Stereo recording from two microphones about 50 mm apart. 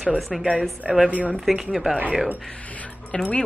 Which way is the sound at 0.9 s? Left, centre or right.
Right.